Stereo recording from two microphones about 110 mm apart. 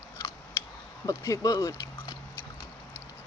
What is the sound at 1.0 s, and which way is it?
Speech, 35° left (ahead or behind).